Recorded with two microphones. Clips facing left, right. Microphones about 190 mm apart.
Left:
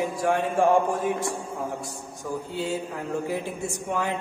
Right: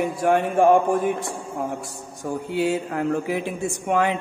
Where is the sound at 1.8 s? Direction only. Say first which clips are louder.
Right 2 dB; 70° right (ahead or behind).